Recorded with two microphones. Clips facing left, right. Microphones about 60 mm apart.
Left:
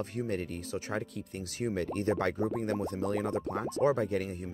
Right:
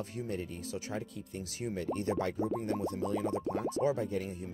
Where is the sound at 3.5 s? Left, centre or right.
Left.